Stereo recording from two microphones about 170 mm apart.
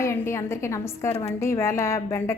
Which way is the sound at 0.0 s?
15° left (ahead or behind).